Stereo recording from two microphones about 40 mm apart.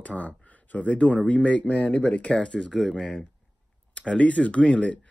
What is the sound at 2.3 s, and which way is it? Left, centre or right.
Speech, left.